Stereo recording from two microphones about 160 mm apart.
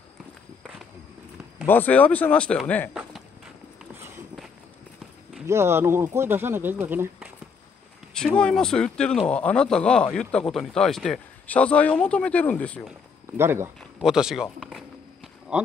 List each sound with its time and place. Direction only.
1.7 s speech: 10° left (ahead or behind)
2.9 s a sound: 5° right (ahead or behind)
5.5 s speech: 15° right (ahead or behind)
8.1 s speech: 5° left (ahead or behind)
13.4 s speech: 15° right (ahead or behind)
13.9 s a sound: 5° right (ahead or behind)